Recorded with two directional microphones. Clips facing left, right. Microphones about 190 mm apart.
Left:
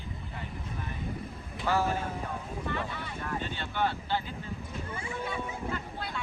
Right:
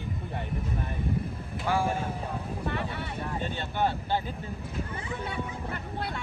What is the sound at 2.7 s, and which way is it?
Vehicle, 60° right (ahead or behind).